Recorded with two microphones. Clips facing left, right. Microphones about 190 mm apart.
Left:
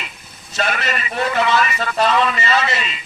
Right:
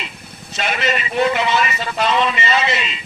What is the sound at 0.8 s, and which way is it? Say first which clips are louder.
A man's voice: right 4 dB; 25° right (ahead or behind).